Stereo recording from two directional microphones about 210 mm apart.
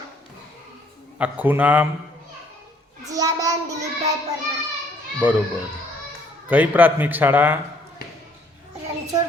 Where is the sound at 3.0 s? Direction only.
15° right (ahead or behind).